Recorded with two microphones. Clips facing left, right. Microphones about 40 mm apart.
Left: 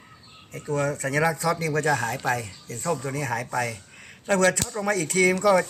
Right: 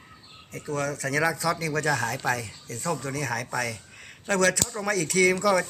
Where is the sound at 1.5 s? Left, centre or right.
Centre.